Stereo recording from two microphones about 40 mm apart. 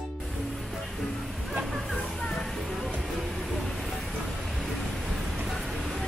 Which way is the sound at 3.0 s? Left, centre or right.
Centre.